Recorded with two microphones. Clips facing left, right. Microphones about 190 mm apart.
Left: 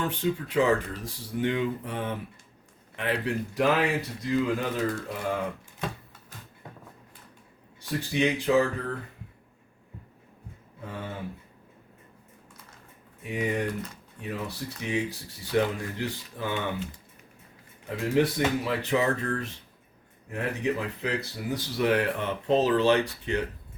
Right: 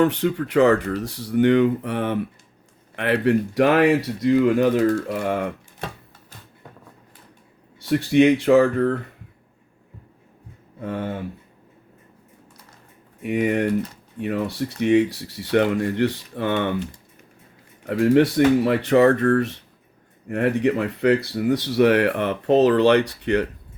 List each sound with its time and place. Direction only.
0.0 s speech: 70° right (ahead or behind)
7.9 s speech: 70° right (ahead or behind)
10.8 s speech: 65° right (ahead or behind)
13.2 s speech: 70° right (ahead or behind)
14.8 s speech: 70° right (ahead or behind)
17.8 s speech: 65° right (ahead or behind)